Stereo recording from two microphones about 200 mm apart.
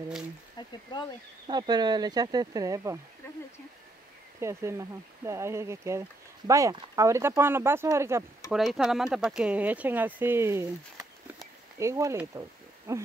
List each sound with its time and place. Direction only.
0.6 s a sound: 20° left (ahead or behind)
1.5 s speech: 20° right (ahead or behind)
4.4 s speech: 15° right (ahead or behind)
8.5 s speech: centre (ahead or behind)